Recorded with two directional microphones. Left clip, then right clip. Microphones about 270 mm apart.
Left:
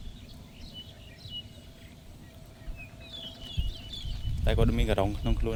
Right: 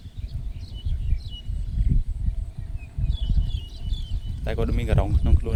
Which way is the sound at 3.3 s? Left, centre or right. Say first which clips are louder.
Right 6 dB; right.